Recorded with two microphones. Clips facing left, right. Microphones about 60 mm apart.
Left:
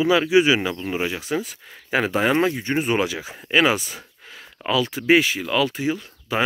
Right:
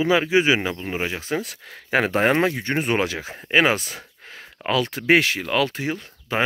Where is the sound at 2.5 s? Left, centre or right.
Right.